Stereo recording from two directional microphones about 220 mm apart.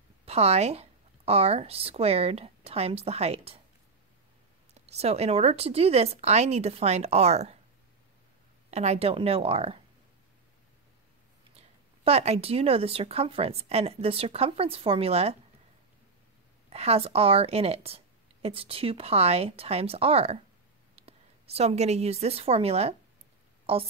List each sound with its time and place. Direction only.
0.2 s speech: 30° right (ahead or behind)
4.7 s a woman's voice: 30° right (ahead or behind)
8.6 s a woman's voice: 30° right (ahead or behind)
11.5 s a woman's voice: 30° right (ahead or behind)
16.7 s a woman's voice: 30° right (ahead or behind)